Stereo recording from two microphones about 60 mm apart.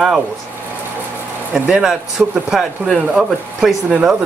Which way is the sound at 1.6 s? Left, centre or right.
Centre.